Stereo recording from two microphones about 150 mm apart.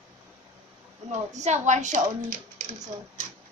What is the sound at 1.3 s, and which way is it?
Speech, 50° right (ahead or behind).